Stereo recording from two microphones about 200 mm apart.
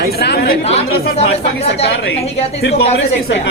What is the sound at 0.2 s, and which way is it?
Speech, 50° left (ahead or behind).